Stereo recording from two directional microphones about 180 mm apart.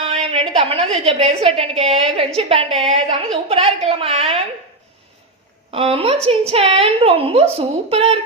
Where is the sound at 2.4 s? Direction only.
35° right (ahead or behind).